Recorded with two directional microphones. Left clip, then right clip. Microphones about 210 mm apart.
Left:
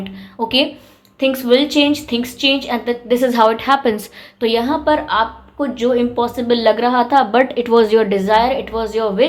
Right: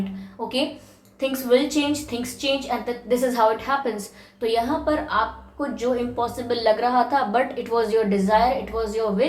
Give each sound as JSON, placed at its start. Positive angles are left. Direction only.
{"t": 0.3, "sound": "a woman's voice", "side_deg": 40}